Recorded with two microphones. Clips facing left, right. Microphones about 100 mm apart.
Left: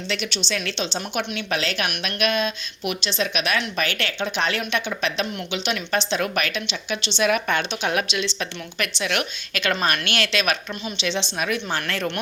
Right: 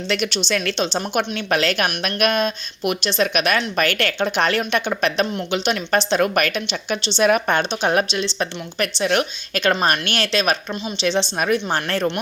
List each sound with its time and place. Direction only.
0.1 s a woman's voice: 50° right (ahead or behind); by 12.0 s 35° right (ahead or behind)